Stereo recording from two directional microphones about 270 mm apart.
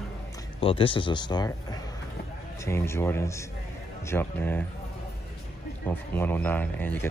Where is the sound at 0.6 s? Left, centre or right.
Centre.